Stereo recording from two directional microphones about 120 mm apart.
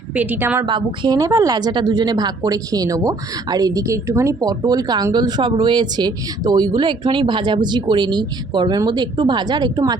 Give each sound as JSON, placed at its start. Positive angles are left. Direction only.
{"t": 0.1, "sound": "a woman's voice", "side_deg": -15}
{"t": 0.6, "sound": "a woman's voice", "side_deg": -40}